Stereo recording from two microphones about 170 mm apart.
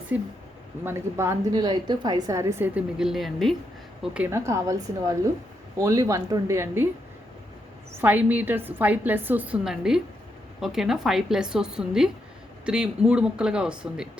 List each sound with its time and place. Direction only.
0.9 s a woman's voice: 15° right (ahead or behind)
3.0 s a woman's voice: centre (ahead or behind)
7.9 s a woman's voice: 10° right (ahead or behind)